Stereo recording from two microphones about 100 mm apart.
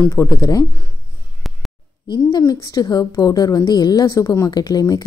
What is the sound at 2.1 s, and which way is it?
A woman's voice, 45° left (ahead or behind).